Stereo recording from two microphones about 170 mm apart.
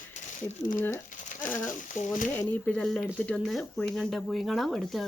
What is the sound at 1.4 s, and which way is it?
A woman's voice, 10° left (ahead or behind).